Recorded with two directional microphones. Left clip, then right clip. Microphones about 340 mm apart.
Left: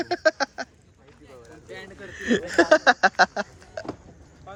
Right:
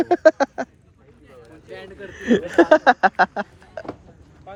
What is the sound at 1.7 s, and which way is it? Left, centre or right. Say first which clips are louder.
Speech: right 3 dB; centre.